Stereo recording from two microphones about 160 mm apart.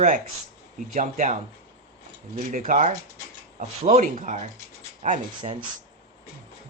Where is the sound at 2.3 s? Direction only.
55° right (ahead or behind).